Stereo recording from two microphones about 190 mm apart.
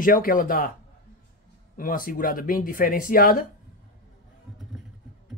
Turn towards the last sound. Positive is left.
turn(degrees=45)  # may be behind; listen again after turning